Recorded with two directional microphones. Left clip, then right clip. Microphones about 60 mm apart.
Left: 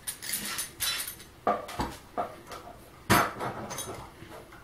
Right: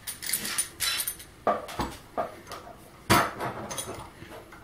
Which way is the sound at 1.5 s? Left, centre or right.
Centre.